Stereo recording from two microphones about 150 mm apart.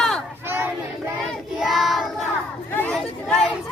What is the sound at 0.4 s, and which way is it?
Battle cry, 15° right (ahead or behind).